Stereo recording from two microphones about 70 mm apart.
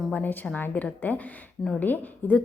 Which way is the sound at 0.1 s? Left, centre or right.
Left.